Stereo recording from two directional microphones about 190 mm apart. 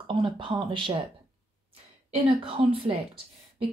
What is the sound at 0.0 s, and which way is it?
Speech, 25° right (ahead or behind).